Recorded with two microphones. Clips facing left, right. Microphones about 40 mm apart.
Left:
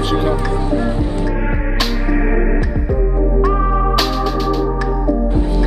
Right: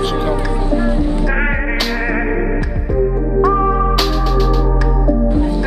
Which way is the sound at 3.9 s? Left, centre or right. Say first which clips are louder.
Even; centre.